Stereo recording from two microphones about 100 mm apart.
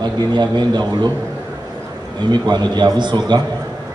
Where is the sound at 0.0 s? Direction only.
45° right (ahead or behind).